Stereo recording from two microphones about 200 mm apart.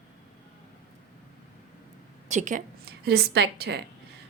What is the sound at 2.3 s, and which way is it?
A woman's voice, 40° right (ahead or behind).